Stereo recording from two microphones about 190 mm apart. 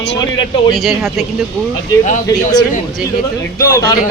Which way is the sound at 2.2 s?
20° left (ahead or behind).